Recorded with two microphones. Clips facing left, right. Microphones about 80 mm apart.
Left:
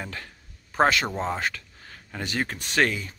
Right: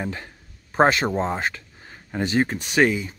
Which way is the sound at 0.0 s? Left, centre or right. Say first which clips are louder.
Right 6 dB; right.